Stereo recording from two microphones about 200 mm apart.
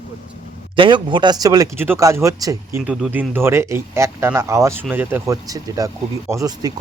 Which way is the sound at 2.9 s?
5° right (ahead or behind).